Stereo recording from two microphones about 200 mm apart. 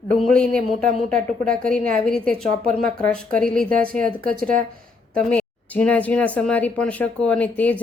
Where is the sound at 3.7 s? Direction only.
45° right (ahead or behind).